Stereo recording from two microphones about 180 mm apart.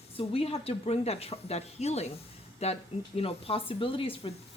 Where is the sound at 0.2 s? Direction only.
30° left (ahead or behind).